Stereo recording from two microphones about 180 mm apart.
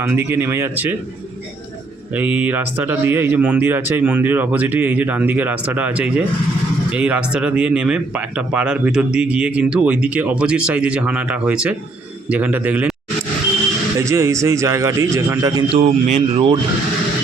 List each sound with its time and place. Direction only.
0.0 s speech: 15° right (ahead or behind)
2.1 s speech: 10° right (ahead or behind)
14.0 s speech: 15° right (ahead or behind)
15.7 s speech: 35° right (ahead or behind)